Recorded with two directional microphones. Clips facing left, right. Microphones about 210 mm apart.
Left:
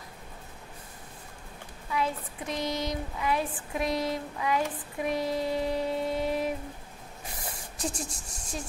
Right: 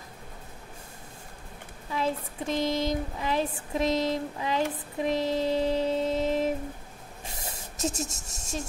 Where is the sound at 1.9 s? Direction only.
30° right (ahead or behind).